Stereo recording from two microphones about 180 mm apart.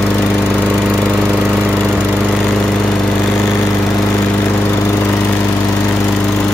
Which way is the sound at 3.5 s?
15° left (ahead or behind).